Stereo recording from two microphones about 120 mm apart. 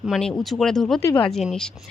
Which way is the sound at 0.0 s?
Centre (ahead or behind).